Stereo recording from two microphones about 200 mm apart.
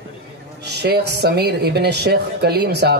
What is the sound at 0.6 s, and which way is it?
A woman's voice, 55° right (ahead or behind).